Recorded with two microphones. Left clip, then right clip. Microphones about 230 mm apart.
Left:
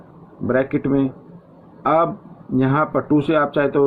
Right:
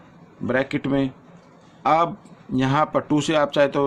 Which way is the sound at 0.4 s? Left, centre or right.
Right.